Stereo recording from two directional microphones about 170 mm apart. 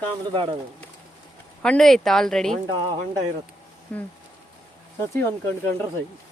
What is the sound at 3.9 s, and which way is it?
Speech, 10° left (ahead or behind).